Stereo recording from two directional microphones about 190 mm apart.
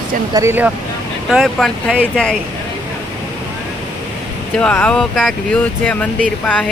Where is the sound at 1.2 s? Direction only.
Centre (ahead or behind).